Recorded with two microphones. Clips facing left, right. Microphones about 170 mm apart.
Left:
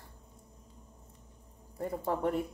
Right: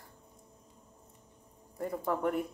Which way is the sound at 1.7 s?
30° left (ahead or behind).